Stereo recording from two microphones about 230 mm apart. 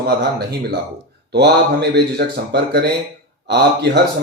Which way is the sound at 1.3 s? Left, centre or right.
Right.